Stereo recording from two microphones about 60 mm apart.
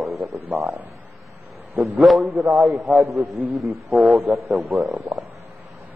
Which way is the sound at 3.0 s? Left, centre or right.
Right.